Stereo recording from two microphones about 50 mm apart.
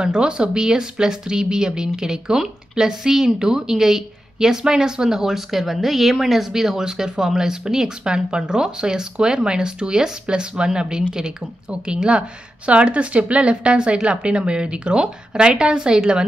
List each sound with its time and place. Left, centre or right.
0.0 s a woman's voice: centre